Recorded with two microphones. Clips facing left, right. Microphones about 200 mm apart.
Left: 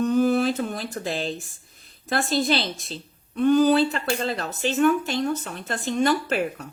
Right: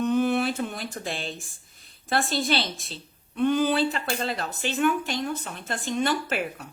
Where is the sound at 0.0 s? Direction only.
40° left (ahead or behind).